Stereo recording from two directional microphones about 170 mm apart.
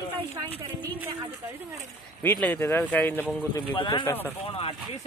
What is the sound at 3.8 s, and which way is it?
Speech, 30° left (ahead or behind).